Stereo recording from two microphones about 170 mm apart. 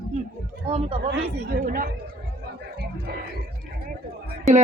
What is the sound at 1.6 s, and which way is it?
Speech, 55° right (ahead or behind).